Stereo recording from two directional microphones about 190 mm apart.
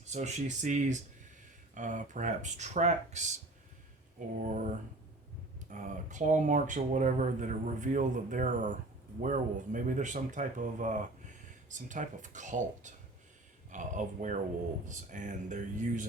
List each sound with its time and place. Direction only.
0.1 s speech: 40° right (ahead or behind)
4.4 s speech: 40° right (ahead or behind)